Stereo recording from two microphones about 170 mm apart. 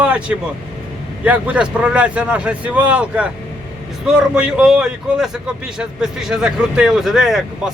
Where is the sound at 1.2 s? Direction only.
10° right (ahead or behind).